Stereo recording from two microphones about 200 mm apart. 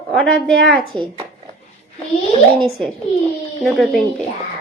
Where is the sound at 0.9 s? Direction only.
25° right (ahead or behind).